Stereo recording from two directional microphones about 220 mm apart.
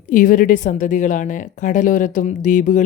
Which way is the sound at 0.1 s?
40° left (ahead or behind).